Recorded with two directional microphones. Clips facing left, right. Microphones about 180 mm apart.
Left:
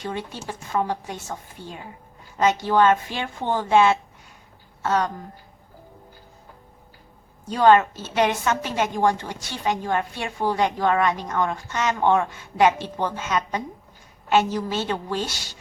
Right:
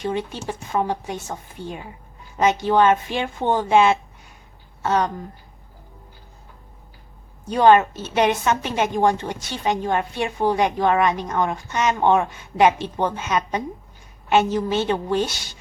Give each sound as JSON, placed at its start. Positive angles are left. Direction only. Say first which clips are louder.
{"t": 0.0, "sound": "a woman's voice", "louder": "right 5 dB", "side_deg": -20}
{"t": 7.5, "sound": "a woman's voice", "louder": "right 2 dB", "side_deg": -20}